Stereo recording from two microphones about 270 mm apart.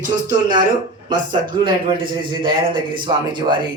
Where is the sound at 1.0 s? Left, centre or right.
Centre.